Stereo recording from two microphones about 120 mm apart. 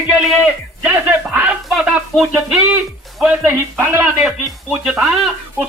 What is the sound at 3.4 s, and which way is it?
Speech, 20° right (ahead or behind).